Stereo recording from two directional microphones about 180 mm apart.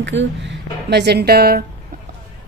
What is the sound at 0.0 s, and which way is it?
A woman's voice, 85° right.